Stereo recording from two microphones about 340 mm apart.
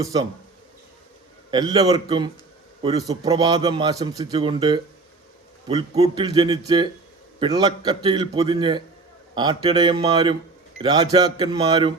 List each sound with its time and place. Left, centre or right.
0.0 s speech: centre
1.5 s a man's voice: centre